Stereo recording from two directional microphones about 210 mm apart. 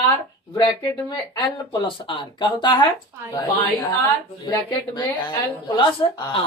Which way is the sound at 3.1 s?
15° right (ahead or behind).